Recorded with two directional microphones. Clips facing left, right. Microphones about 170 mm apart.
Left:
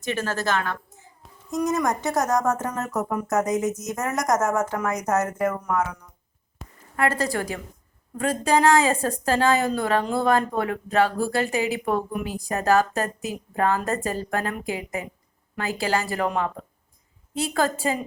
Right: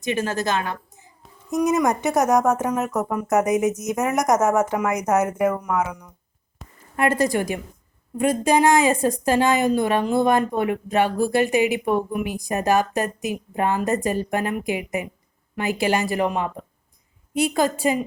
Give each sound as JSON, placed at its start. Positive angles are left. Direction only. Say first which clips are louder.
{"t": 0.0, "sound": "speech", "louder": "right 3 dB", "side_deg": -15}
{"t": 6.6, "sound": "a sound", "louder": "left 1 dB", "side_deg": 0}
{"t": 6.9, "sound": "a woman's voice", "louder": "right 4 dB", "side_deg": -20}